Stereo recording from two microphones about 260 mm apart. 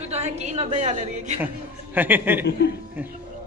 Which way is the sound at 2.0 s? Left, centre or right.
Centre.